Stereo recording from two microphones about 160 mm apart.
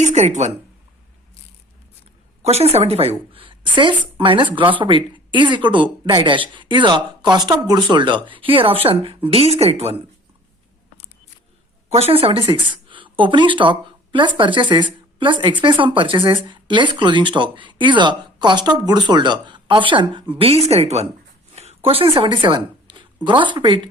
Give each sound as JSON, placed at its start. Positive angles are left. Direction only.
{"t": 0.0, "sound": "a woman's voice", "side_deg": -45}
{"t": 2.4, "sound": "speech", "side_deg": -40}
{"t": 11.9, "sound": "speech", "side_deg": -40}
{"t": 21.5, "sound": "a sound", "side_deg": -40}
{"t": 23.2, "sound": "speech", "side_deg": -30}